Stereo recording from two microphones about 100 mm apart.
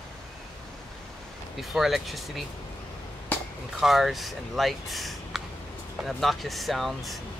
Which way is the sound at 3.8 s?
Centre (ahead or behind).